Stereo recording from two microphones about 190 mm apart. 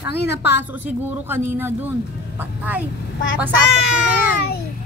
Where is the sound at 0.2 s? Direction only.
60° left (ahead or behind).